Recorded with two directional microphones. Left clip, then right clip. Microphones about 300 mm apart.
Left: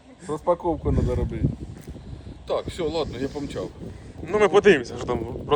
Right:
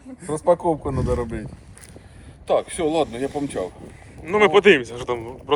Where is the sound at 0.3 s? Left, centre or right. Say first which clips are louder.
Right 4 dB; right.